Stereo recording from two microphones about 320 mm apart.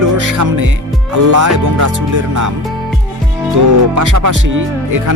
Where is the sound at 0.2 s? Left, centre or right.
Right.